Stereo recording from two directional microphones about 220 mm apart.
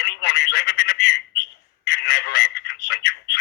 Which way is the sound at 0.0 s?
50° left (ahead or behind).